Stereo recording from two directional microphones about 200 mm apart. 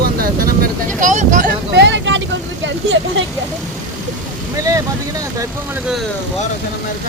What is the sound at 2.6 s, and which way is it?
Speech, 65° right (ahead or behind).